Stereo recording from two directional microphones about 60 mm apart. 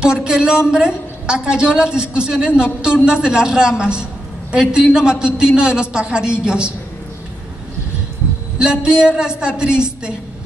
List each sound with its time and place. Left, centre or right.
0.0 s a woman's voice: centre
8.5 s a woman's voice: centre